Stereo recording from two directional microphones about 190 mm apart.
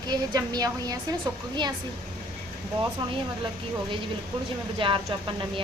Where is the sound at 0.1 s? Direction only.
20° right (ahead or behind).